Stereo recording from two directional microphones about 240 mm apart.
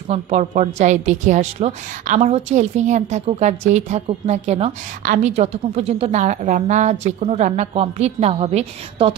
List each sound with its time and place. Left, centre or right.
0.1 s a woman's voice: right